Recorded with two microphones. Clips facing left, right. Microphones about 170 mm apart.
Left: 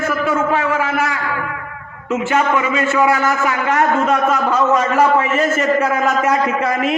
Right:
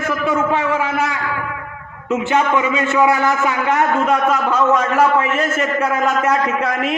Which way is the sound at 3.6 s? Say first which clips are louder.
Left 1 dB; centre (ahead or behind).